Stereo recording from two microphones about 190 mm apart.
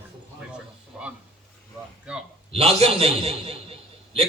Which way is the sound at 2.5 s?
30° right (ahead or behind).